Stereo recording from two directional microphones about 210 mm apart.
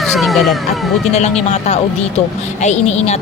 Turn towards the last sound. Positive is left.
turn(degrees=30)  # may be behind; listen again after turning